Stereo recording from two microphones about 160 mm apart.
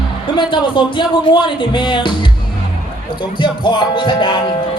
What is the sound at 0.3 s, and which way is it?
Speech, 30° left (ahead or behind).